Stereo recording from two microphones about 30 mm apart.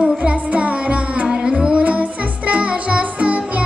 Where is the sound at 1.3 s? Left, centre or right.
Right.